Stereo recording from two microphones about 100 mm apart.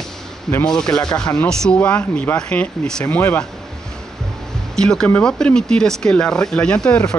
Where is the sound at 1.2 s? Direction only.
10° left (ahead or behind).